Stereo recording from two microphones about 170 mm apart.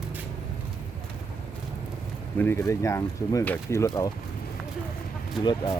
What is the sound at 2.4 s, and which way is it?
Speech, 15° left (ahead or behind).